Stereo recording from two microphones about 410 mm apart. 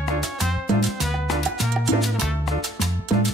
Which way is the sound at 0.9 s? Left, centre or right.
Centre.